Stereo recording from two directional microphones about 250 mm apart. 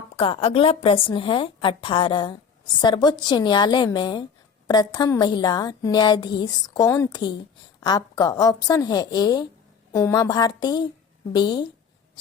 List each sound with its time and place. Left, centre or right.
0.2 s a woman's voice: left